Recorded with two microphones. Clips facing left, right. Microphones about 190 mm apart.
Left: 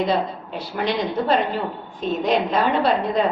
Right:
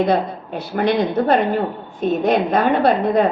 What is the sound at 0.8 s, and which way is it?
A woman's voice, 55° right (ahead or behind).